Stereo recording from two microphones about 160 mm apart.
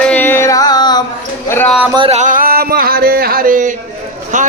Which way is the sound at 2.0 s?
50° right (ahead or behind).